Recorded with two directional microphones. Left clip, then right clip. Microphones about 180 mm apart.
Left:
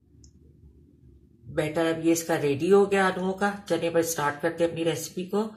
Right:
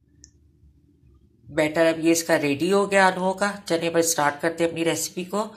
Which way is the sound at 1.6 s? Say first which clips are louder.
Right 6 dB; 35° right (ahead or behind).